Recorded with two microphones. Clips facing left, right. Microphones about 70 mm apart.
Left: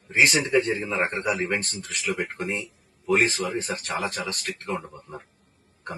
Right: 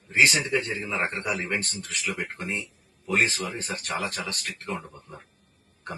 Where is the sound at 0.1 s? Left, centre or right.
Centre.